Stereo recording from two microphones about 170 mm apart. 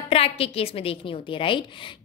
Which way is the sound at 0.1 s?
35° left (ahead or behind).